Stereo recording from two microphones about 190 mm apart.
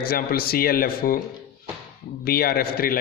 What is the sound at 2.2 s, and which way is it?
Speech, 55° left (ahead or behind).